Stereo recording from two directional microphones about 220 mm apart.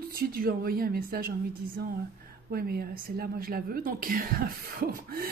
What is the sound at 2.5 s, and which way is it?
A woman's voice, 45° right (ahead or behind).